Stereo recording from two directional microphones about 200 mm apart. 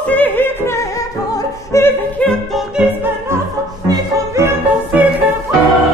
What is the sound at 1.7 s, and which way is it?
Music, 10° left (ahead or behind).